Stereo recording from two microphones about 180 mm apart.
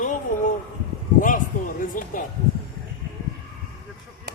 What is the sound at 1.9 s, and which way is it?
Speech, 45° left (ahead or behind).